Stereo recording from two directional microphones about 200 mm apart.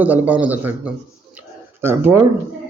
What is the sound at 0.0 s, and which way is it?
Speech, 10° right (ahead or behind).